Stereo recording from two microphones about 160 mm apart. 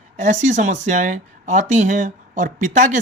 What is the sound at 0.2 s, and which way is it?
Speech, 50° right (ahead or behind).